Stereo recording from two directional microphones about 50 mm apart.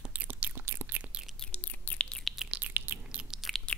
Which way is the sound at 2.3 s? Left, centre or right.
Centre.